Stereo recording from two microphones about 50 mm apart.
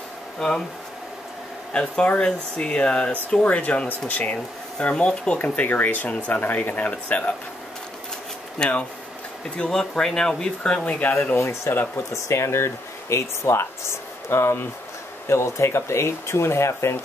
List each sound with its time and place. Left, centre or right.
0.4 s speech: centre
1.7 s speech: centre
5.4 s speech: left
8.6 s speech: centre
10.7 s speech: left
11.3 s speech: left